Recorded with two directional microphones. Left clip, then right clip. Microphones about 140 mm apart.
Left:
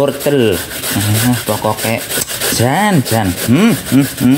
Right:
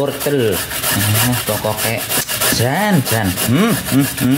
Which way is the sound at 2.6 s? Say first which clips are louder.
Left 3 dB; 45° left (ahead or behind).